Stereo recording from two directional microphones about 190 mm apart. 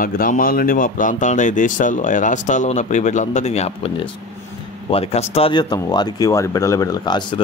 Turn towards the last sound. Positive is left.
turn(degrees=25)  # may be behind; listen again after turning